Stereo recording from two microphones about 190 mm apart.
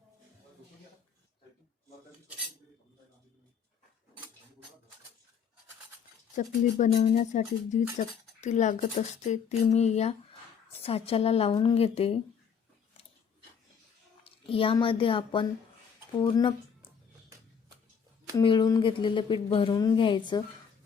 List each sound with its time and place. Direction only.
6.3 s speech: 40° left (ahead or behind)
14.5 s speech: 30° left (ahead or behind)
18.3 s speech: 20° left (ahead or behind)